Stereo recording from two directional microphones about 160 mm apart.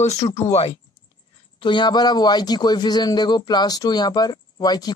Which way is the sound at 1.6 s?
30° left (ahead or behind).